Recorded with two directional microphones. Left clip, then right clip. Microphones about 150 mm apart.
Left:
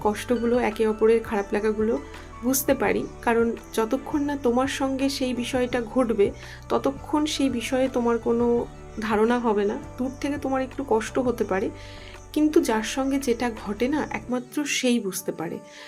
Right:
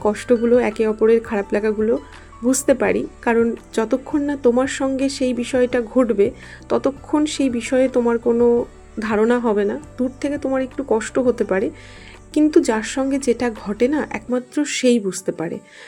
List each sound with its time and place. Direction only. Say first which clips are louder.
0.0 s speech: right 7 dB; 30° right (ahead or behind)